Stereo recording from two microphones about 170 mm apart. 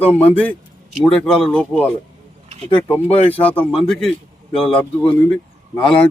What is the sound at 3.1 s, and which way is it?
Speech, 35° left (ahead or behind).